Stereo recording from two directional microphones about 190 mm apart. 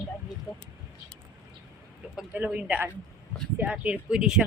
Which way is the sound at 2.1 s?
5° right (ahead or behind).